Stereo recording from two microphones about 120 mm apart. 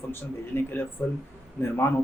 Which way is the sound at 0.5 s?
20° left (ahead or behind).